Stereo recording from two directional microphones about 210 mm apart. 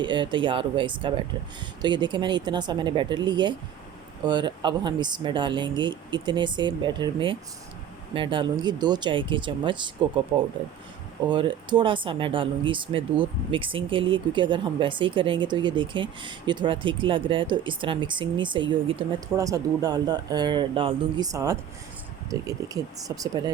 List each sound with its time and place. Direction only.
0.0 s speech: 20° right (ahead or behind)